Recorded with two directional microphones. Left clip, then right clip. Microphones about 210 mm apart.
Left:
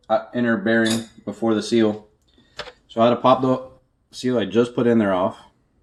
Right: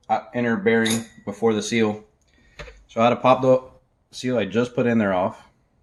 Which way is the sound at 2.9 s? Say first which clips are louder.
Left 1 dB; 35° right (ahead or behind).